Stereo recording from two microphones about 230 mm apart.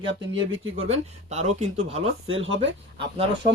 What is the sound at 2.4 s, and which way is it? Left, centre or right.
Speech, right.